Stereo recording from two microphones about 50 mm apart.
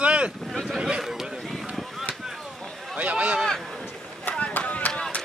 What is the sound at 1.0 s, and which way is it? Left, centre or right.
Vehicle, centre.